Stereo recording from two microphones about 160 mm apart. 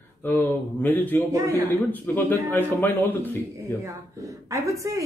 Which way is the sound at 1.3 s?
20° right (ahead or behind).